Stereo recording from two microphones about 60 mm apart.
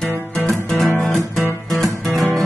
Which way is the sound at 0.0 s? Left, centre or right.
Centre.